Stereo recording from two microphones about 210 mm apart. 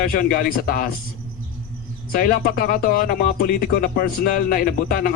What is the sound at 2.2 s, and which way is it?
Speech, 45° left (ahead or behind).